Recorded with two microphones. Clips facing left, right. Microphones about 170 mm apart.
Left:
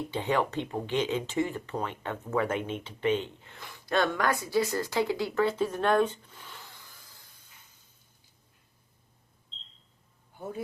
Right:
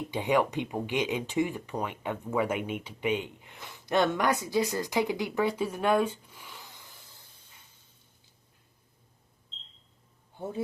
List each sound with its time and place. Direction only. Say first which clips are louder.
0.1 s speech: right 3 dB; 15° right (ahead or behind)
10.3 s speech: right 2 dB; 25° right (ahead or behind)